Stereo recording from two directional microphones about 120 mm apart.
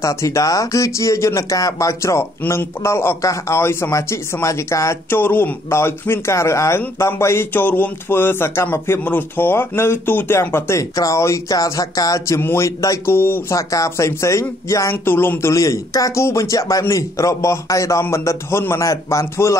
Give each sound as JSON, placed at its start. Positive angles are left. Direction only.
{"t": 0.0, "sound": "speech", "side_deg": 25}